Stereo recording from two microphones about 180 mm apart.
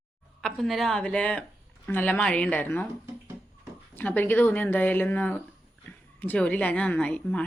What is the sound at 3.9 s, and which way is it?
Speech, 10° left (ahead or behind).